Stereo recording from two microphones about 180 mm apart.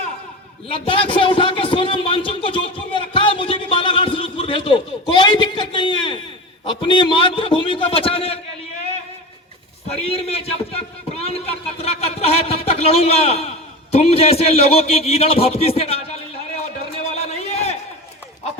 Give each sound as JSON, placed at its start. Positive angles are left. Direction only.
{"t": 0.7, "sound": "a man's voice", "side_deg": 30}
{"t": 9.8, "sound": "a man's voice", "side_deg": 35}
{"t": 16.6, "sound": "a sound", "side_deg": 35}